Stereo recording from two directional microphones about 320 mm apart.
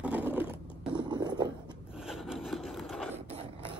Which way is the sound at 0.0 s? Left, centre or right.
Centre.